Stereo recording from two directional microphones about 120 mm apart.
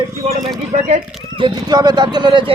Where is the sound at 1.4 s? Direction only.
40° right (ahead or behind).